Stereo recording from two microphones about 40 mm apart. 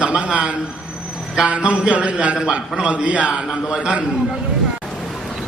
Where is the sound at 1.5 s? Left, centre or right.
Right.